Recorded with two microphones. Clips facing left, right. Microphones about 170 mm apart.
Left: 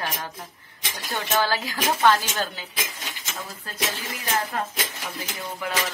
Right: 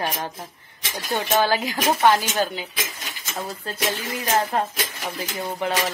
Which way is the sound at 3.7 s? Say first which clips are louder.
Right 7 dB; 25° right (ahead or behind).